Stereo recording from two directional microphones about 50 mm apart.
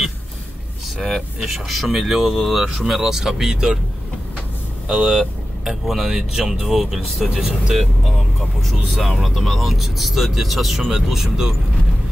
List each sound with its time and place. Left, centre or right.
1.4 s speech: centre
4.8 s speech: centre
8.6 s speech: centre